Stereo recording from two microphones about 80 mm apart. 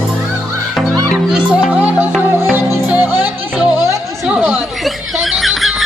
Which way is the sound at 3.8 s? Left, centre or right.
Right.